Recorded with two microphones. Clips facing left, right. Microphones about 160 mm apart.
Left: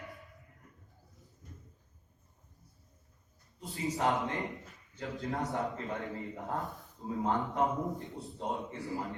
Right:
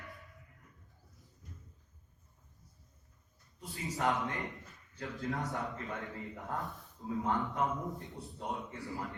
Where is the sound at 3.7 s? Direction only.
20° left (ahead or behind).